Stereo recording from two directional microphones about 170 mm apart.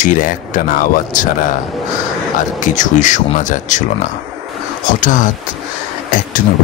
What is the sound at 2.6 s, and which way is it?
Speech, 50° left (ahead or behind).